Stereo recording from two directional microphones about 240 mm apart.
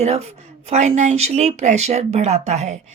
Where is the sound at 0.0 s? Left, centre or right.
Right.